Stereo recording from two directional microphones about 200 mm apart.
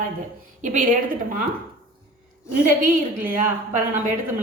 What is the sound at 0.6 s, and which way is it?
Speech, 40° right (ahead or behind).